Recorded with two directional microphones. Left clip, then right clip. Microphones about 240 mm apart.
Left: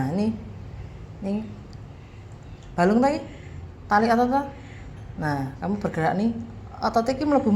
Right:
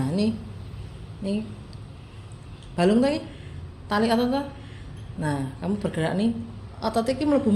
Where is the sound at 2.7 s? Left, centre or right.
Centre.